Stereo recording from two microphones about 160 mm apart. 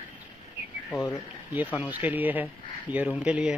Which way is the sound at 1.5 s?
10° right (ahead or behind).